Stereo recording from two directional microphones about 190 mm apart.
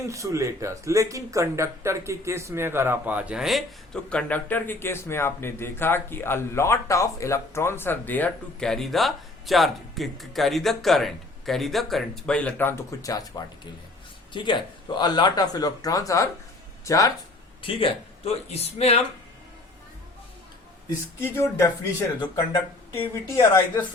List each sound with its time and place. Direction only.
0.0 s speech: 15° right (ahead or behind); by 13.2 s 20° left (ahead or behind)
14.3 s speech: 25° left (ahead or behind)
17.6 s speech: 30° left (ahead or behind)
21.2 s speech: 15° left (ahead or behind)
23.3 s speech: 15° left (ahead or behind)